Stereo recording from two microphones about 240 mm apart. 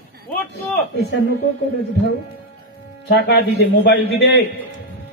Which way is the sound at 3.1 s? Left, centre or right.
Left.